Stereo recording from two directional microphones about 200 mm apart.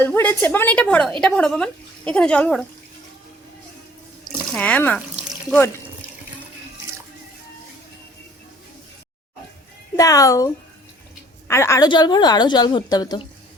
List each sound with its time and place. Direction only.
0.0 s a woman's voice: 10° left (ahead or behind)
4.5 s a woman's voice: 5° left (ahead or behind)
4.9 s water: 5° right (ahead or behind)
10.0 s a woman's voice: 15° left (ahead or behind)